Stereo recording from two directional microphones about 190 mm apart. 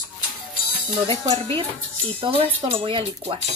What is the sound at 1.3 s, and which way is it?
Speech, 30° right (ahead or behind).